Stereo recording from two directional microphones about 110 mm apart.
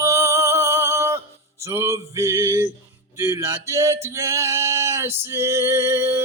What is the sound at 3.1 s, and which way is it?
Male singing, 25° right (ahead or behind).